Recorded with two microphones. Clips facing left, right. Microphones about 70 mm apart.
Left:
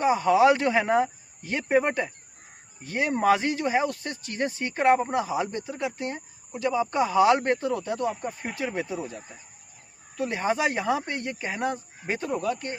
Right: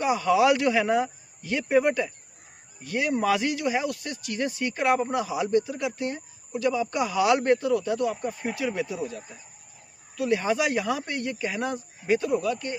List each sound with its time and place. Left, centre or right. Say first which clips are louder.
0.0 s speech: left 2 dB; left